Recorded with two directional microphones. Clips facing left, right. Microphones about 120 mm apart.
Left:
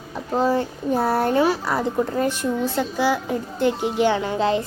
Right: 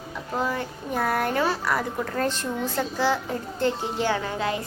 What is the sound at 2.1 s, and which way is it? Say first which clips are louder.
Speech: left 4 dB; 10° left (ahead or behind).